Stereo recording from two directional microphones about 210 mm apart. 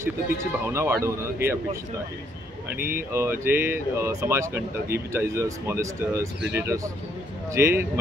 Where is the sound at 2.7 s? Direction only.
45° right (ahead or behind).